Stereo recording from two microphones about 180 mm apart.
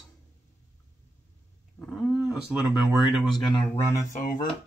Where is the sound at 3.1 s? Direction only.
Centre (ahead or behind).